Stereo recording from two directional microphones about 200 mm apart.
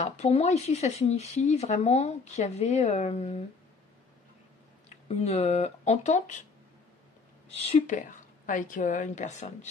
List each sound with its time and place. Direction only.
0.0 s speech: 35° left (ahead or behind)
4.8 s speech: 30° left (ahead or behind)
7.4 s speech: 30° left (ahead or behind)